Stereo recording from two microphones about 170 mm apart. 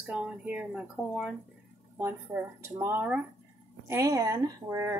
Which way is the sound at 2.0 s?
15° right (ahead or behind).